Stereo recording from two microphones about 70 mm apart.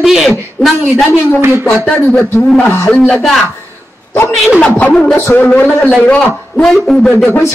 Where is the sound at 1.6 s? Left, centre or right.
Centre.